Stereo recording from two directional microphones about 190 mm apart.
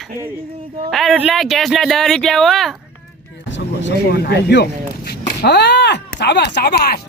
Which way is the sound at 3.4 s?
70° left (ahead or behind).